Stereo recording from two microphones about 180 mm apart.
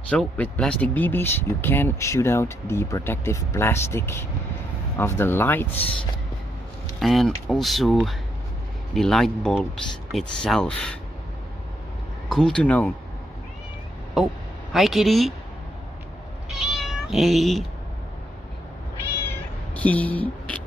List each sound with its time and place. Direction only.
0.1 s speech: 5° left (ahead or behind)
7.0 s speech: centre (ahead or behind)
12.3 s speech: 5° left (ahead or behind)
14.1 s speech: centre (ahead or behind)
16.4 s cat: centre (ahead or behind)
19.2 s cat: 10° left (ahead or behind)